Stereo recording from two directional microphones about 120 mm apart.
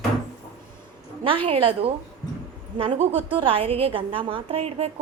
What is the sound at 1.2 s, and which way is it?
A woman's voice, 50° right (ahead or behind).